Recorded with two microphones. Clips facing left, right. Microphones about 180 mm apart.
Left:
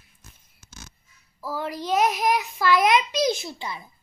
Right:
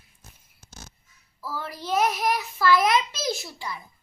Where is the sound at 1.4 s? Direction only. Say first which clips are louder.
Left 4 dB; 15° left (ahead or behind).